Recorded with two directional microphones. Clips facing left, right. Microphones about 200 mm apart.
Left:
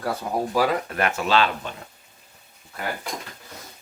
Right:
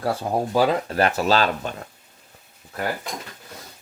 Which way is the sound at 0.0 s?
30° right (ahead or behind).